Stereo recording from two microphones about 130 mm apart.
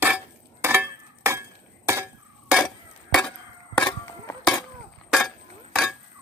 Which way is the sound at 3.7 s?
10° left (ahead or behind).